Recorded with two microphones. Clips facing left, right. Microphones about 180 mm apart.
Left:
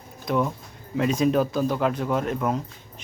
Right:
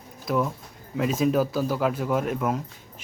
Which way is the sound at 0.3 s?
Centre (ahead or behind).